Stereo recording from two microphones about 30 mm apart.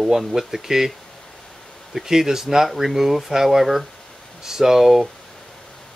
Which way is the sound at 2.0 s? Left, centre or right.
Centre.